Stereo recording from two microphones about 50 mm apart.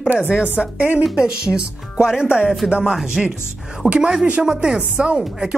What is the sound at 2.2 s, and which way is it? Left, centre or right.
Music, left.